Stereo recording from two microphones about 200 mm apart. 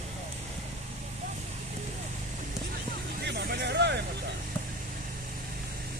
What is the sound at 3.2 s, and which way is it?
Vehicle, 55° right (ahead or behind).